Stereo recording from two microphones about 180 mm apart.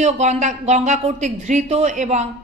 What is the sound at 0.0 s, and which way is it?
A woman's voice, 40° right (ahead or behind).